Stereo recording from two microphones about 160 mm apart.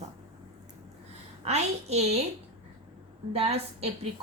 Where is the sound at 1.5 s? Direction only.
45° right (ahead or behind).